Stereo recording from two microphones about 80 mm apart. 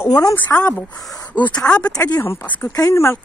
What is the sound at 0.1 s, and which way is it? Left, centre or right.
Speech, left.